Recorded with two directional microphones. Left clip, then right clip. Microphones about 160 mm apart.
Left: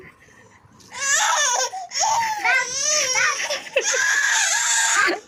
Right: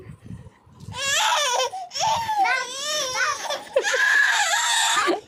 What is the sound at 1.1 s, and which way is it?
Baby cry, 35° right (ahead or behind).